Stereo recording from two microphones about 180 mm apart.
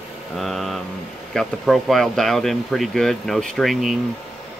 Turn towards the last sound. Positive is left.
turn(degrees=0)  # may be behind; listen again after turning